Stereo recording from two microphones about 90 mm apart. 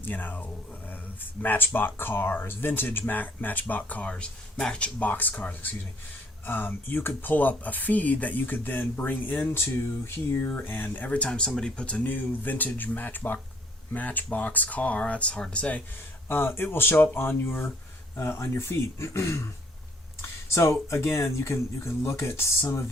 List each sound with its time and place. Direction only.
0.0 s speech: 20° left (ahead or behind)
16.3 s speech: 25° left (ahead or behind)